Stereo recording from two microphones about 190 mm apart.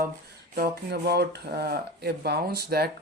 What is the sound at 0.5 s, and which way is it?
Speech, 55° right (ahead or behind).